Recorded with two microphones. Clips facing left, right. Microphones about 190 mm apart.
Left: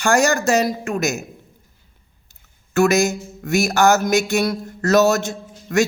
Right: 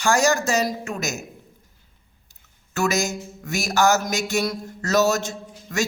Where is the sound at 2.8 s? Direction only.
60° left (ahead or behind).